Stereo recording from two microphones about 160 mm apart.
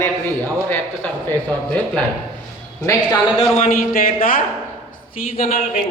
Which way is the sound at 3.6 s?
60° left (ahead or behind).